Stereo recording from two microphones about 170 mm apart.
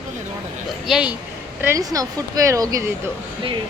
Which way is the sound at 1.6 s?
20° right (ahead or behind).